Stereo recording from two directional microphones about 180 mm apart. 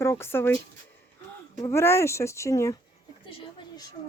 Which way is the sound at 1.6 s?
15° left (ahead or behind).